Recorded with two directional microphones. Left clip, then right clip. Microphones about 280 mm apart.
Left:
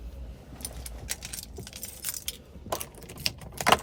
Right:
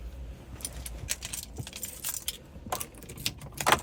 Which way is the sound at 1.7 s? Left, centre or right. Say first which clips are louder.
Even; centre.